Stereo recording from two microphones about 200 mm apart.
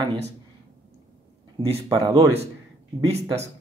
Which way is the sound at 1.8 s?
20° right (ahead or behind).